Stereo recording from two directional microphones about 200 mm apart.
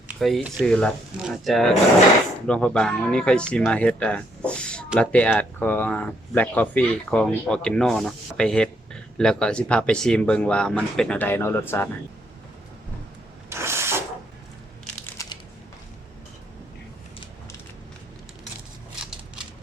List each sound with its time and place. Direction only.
0.1 s speech: centre (ahead or behind)
13.5 s mechanisms: 10° right (ahead or behind)
15.2 s crushing: 15° left (ahead or behind)